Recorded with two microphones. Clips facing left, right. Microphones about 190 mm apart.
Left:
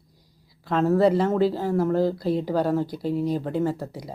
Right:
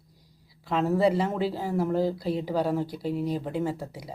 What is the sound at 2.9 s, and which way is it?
Speech, 40° left (ahead or behind).